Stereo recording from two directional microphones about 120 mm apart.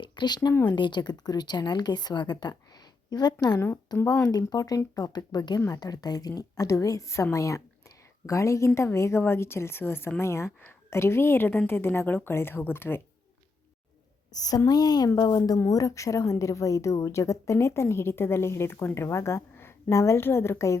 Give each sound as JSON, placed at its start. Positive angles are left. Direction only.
{"t": 0.0, "sound": "a woman's voice", "side_deg": 40}
{"t": 14.3, "sound": "a woman's voice", "side_deg": 30}